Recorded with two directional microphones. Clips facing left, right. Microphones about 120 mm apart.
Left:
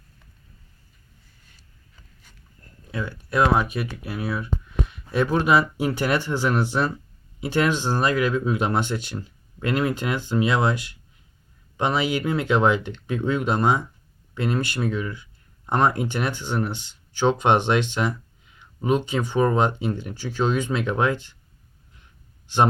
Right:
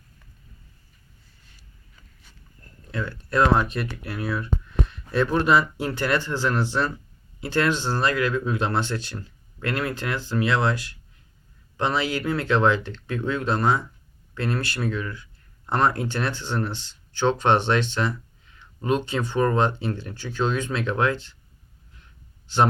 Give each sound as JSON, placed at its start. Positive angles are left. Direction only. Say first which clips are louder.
{"t": 2.9, "sound": "speech", "louder": "even", "side_deg": 10}